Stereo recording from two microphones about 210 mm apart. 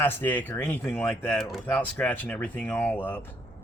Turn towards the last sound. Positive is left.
turn(degrees=10)  # may be behind; listen again after turning